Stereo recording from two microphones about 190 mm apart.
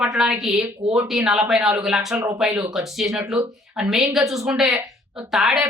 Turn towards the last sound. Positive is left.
turn(degrees=0)  # may be behind; listen again after turning